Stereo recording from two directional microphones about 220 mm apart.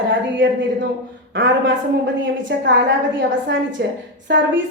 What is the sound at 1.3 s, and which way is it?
A woman's voice, 55° right (ahead or behind).